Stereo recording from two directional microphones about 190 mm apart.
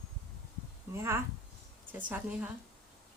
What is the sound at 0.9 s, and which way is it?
Speech, 15° right (ahead or behind).